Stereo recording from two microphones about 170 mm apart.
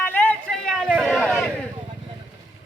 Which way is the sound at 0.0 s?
10° left (ahead or behind).